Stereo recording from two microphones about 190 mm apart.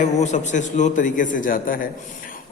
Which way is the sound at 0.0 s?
40° left (ahead or behind).